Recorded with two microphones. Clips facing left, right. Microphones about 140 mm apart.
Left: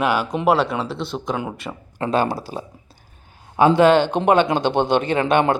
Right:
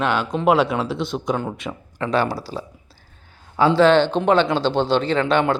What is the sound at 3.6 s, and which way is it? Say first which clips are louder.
Speech: left 1 dB; 15° left (ahead or behind).